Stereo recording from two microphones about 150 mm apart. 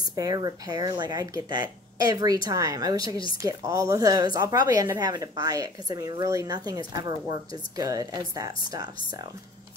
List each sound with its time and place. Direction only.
0.1 s speech: 25° right (ahead or behind)